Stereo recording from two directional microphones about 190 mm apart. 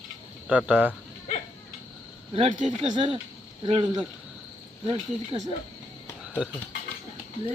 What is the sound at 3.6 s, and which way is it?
Speech, 30° right (ahead or behind).